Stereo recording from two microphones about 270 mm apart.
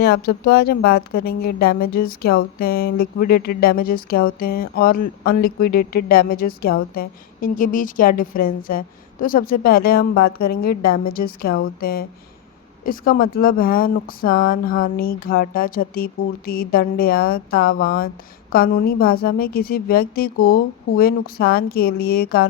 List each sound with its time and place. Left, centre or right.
0.0 s speech: left